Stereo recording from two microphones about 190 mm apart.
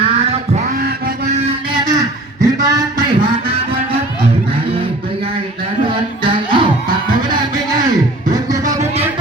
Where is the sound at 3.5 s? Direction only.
30° right (ahead or behind).